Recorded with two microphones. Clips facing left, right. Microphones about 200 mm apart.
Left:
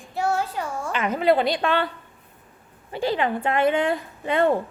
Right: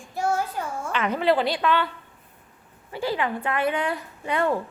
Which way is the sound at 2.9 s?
25° left (ahead or behind).